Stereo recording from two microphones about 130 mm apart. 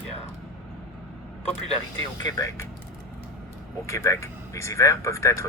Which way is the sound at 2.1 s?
25° left (ahead or behind).